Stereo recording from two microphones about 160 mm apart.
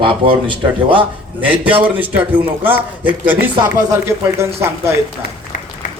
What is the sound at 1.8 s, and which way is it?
Speech, 10° right (ahead or behind).